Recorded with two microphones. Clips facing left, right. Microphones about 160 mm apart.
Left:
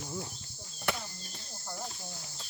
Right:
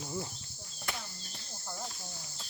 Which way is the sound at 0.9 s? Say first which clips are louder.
Left 6 dB; 70° left (ahead or behind).